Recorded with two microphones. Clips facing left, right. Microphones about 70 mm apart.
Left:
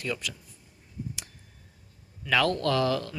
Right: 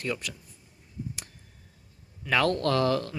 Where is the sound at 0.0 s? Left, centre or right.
Right.